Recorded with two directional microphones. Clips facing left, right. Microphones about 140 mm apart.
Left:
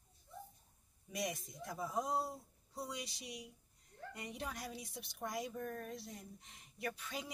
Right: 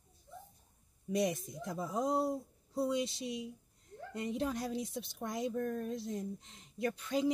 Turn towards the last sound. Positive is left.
turn(degrees=-20)  # may be behind; listen again after turning